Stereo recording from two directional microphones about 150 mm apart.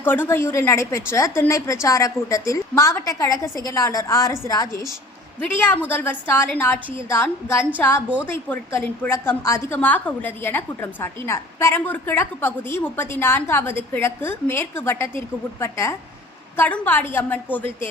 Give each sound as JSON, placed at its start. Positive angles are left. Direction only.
{"t": 0.0, "sound": "a woman's voice", "side_deg": 15}
{"t": 5.4, "sound": "a woman's voice", "side_deg": 10}